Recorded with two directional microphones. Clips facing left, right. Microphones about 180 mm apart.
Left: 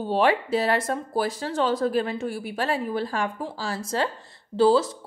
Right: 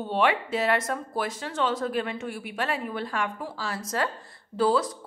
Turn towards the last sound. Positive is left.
turn(degrees=25)  # may be behind; listen again after turning